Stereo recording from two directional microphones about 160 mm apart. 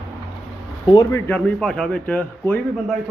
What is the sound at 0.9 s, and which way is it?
A man's voice, 20° left (ahead or behind).